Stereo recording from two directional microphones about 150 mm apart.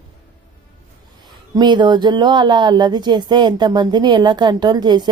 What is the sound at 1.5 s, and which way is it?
Speech, 30° right (ahead or behind).